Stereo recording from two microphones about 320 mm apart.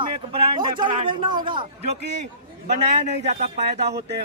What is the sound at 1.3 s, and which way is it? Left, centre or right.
Speech, centre.